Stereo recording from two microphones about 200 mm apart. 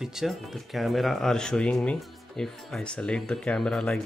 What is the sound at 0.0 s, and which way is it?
Speech, centre (ahead or behind).